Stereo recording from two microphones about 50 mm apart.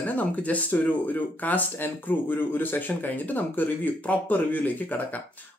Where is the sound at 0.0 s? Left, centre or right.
Left.